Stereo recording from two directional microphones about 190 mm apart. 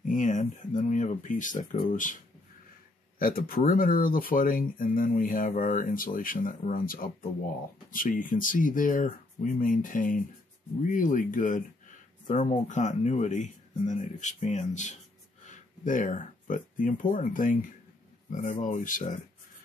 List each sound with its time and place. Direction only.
0.0 s speech: 40° left (ahead or behind)
3.2 s speech: 50° left (ahead or behind)